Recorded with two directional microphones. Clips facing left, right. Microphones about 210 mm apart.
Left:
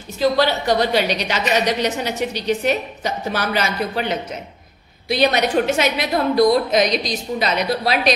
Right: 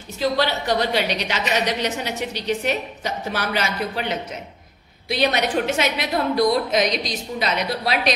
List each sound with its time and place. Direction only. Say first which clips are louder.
0.4 s a woman's voice: left 4 dB; 40° left (ahead or behind)
5.0 s a woman's voice: left 3 dB; 40° left (ahead or behind)